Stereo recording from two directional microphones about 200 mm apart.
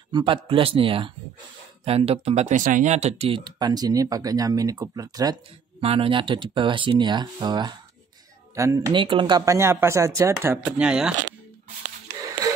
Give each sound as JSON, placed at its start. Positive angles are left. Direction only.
{"t": 0.1, "sound": "a man's voice", "side_deg": -25}